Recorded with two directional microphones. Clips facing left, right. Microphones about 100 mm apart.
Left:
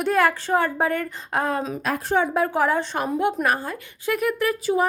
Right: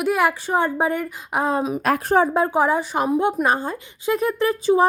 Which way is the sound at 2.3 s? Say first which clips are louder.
Right 2 dB; 25° right (ahead or behind).